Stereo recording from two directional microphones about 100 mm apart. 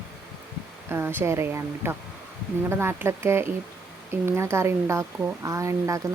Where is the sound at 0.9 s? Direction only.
25° right (ahead or behind).